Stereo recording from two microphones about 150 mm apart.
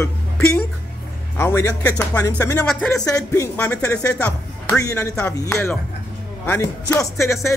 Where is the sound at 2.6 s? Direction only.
5° left (ahead or behind).